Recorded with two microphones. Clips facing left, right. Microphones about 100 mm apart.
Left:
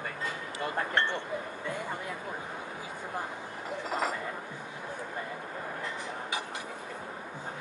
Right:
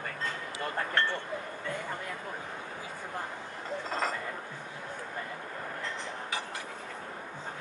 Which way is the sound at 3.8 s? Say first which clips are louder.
Left 1 dB; 10° left (ahead or behind).